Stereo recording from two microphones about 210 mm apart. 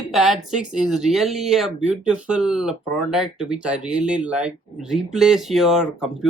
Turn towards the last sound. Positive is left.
turn(degrees=0)  # may be behind; listen again after turning